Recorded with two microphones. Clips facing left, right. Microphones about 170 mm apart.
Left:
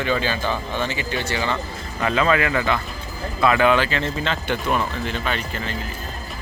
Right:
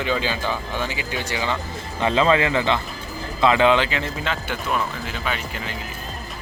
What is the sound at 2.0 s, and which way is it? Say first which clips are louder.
Speech: right 1 dB; 25° right (ahead or behind).